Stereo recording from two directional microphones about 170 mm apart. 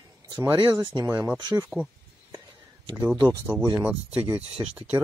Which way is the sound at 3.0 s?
20° right (ahead or behind).